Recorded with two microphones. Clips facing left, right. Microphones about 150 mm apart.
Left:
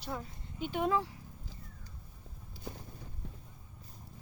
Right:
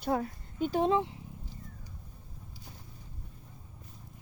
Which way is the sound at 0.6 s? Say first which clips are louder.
Right 6 dB; 35° right (ahead or behind).